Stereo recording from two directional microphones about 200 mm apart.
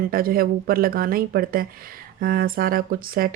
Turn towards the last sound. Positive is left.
turn(degrees=-45)  # may be behind; listen again after turning